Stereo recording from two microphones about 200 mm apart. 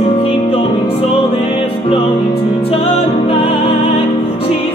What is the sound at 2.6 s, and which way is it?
Music, 30° left (ahead or behind).